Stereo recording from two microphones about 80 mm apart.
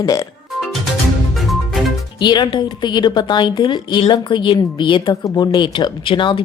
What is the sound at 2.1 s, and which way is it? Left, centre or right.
Speech, left.